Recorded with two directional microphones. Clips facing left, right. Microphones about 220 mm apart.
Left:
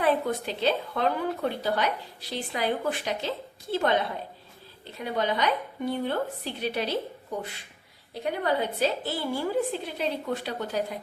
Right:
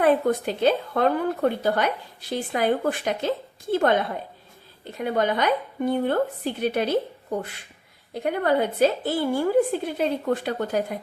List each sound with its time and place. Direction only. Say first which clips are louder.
0.0 s a woman's voice: right 5 dB; 50° right (ahead or behind)
4.9 s a woman's voice: right 4 dB; 50° right (ahead or behind)
8.1 s a woman's voice: right 5 dB; 50° right (ahead or behind)